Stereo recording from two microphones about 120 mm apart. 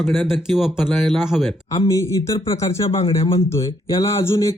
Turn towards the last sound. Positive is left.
turn(degrees=20)  # may be behind; listen again after turning